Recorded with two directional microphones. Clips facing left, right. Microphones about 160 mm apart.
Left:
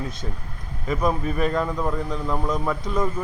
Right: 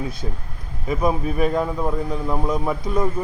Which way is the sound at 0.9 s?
10° right (ahead or behind).